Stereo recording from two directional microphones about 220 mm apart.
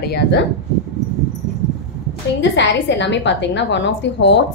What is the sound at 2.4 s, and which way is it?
A woman's voice, 55° left (ahead or behind).